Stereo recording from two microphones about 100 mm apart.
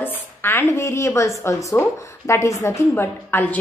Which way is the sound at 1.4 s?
30° left (ahead or behind).